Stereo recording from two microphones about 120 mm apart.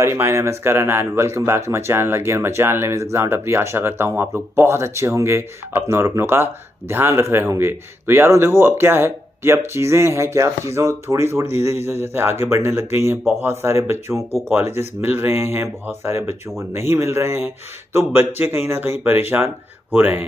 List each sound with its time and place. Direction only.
0.0 s speech: 20° right (ahead or behind)